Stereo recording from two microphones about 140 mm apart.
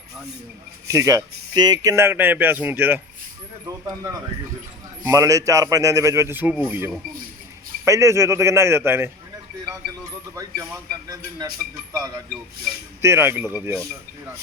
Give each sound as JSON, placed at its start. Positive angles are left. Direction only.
{"t": 0.9, "sound": "a man's voice", "side_deg": -25}
{"t": 13.0, "sound": "speech", "side_deg": -15}